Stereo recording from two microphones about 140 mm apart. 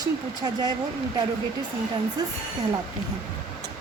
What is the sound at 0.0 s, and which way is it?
Speech, 30° right (ahead or behind).